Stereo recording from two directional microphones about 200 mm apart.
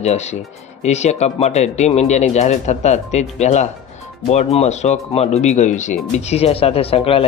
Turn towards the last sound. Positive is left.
turn(degrees=30)  # may be behind; listen again after turning